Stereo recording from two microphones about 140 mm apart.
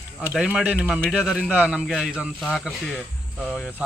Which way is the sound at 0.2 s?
5° right (ahead or behind).